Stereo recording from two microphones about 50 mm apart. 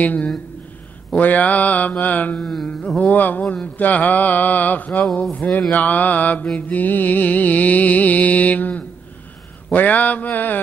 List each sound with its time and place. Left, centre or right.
0.0 s music: left
2.3 s carnatic music: centre
3.0 s music: left